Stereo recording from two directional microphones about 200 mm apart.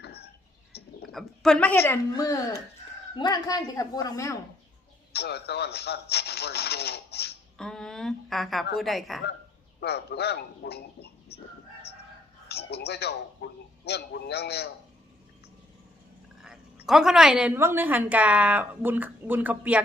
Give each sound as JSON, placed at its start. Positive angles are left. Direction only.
{"t": 0.0, "sound": "a sound", "side_deg": 55}
{"t": 0.7, "sound": "bird", "side_deg": 55}
{"t": 1.1, "sound": "speech", "side_deg": 0}
{"t": 5.1, "sound": "rub", "side_deg": 55}
{"t": 7.6, "sound": "a sound", "side_deg": 5}
{"t": 8.7, "sound": "a woman's voice", "side_deg": 0}
{"t": 9.8, "sound": "a man's voice", "side_deg": 55}
{"t": 12.5, "sound": "a man's voice", "side_deg": 55}
{"t": 16.8, "sound": "a woman's voice", "side_deg": 0}